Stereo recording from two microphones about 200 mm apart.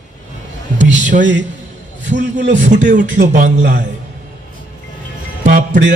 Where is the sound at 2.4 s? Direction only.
60° right (ahead or behind).